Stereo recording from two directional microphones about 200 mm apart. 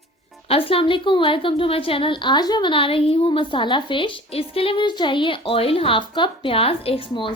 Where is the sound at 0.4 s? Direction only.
30° left (ahead or behind).